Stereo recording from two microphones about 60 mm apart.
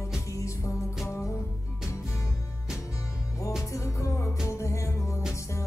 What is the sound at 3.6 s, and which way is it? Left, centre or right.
Music, left.